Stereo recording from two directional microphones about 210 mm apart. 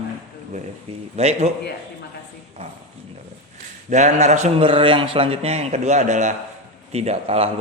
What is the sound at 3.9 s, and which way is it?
A man's voice, 35° right (ahead or behind).